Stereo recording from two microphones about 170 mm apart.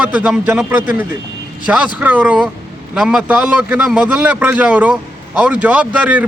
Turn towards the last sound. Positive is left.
turn(degrees=-10)  # may be behind; listen again after turning